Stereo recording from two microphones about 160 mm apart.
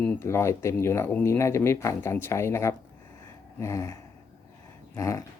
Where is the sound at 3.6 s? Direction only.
20° left (ahead or behind).